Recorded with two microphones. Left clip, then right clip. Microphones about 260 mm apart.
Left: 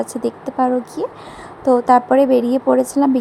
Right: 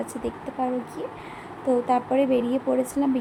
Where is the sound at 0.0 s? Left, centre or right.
Left.